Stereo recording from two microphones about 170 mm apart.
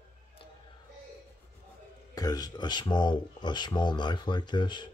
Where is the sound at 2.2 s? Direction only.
25° left (ahead or behind).